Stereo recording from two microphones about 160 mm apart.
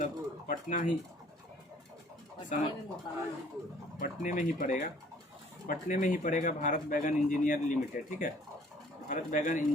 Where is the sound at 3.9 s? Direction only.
50° left (ahead or behind).